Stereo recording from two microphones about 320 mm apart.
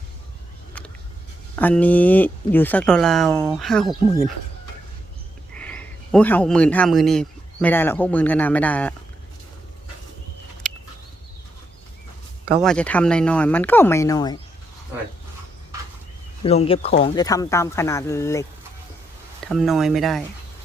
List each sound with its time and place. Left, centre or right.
1.5 s speech: centre
5.5 s a man's voice: centre
10.6 s a sound: centre
12.5 s speech: centre
16.4 s speech: centre
19.5 s speech: centre